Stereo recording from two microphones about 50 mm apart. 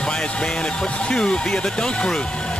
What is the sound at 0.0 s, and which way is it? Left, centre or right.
Speech, centre.